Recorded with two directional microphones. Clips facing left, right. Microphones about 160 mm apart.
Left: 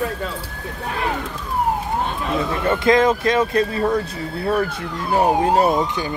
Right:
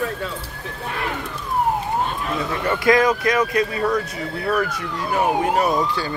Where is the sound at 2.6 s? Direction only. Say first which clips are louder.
Left 1 dB; 25° left (ahead or behind).